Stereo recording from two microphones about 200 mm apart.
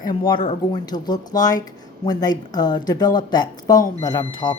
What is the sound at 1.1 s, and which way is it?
A woman's voice, 20° left (ahead or behind).